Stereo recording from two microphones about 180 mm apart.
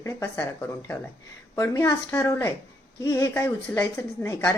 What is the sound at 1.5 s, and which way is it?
Speech, 15° left (ahead or behind).